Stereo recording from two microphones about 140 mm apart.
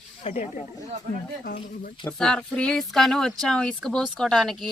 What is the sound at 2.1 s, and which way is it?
Speech, 5° left (ahead or behind).